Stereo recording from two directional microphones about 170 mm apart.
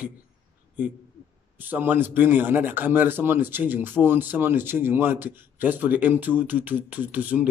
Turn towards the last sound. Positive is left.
turn(degrees=-10)  # may be behind; listen again after turning